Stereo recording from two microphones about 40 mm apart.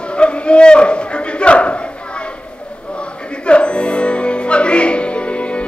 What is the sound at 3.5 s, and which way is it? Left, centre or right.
Music, left.